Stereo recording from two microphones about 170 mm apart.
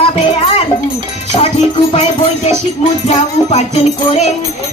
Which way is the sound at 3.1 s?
40° left (ahead or behind).